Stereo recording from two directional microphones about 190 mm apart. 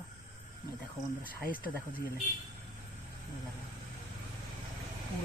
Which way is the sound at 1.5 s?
50° left (ahead or behind).